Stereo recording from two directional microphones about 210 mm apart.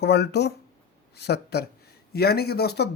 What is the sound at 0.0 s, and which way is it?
Speech, 55° left (ahead or behind).